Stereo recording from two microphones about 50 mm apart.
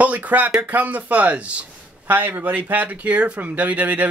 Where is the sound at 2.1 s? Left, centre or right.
Right.